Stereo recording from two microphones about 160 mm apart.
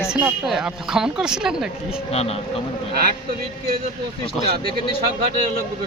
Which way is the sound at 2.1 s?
40° left (ahead or behind).